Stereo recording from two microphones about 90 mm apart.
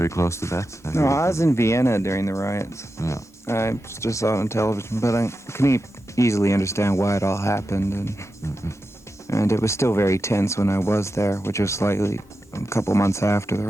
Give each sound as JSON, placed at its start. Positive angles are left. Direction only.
{"t": 0.0, "sound": "speech", "side_deg": 30}
{"t": 9.2, "sound": "speech", "side_deg": 35}